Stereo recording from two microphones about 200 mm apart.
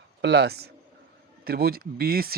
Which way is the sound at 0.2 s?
55° right (ahead or behind).